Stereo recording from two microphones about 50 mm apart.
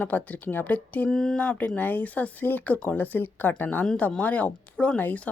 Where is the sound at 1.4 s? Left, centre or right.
Left.